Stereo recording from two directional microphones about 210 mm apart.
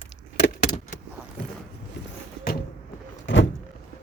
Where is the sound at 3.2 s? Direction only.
60° left (ahead or behind).